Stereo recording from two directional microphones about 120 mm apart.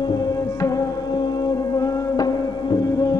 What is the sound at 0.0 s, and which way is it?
Music, 35° left (ahead or behind).